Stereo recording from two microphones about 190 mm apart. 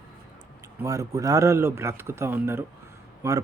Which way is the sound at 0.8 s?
15° right (ahead or behind).